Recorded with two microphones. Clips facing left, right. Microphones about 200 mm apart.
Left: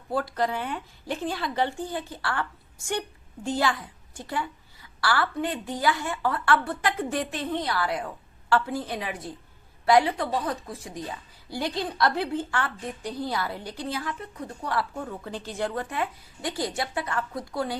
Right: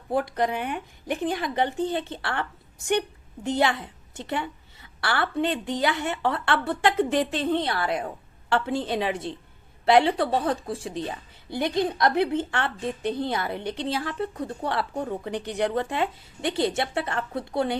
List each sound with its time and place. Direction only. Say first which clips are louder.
0.1 s a woman's voice: right 2 dB; 20° right (ahead or behind)